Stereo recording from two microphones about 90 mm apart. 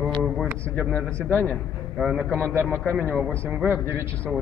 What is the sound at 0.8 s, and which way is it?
Speech, 15° left (ahead or behind).